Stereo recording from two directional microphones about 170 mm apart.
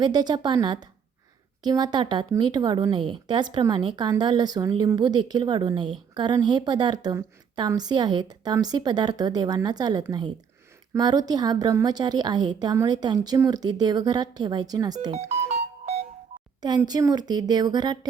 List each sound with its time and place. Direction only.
0.0 s speech: 25° right (ahead or behind)
15.4 s music: 40° right (ahead or behind)
16.6 s speech: 25° right (ahead or behind)